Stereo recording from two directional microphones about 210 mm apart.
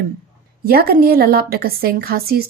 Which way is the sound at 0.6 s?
45° right (ahead or behind).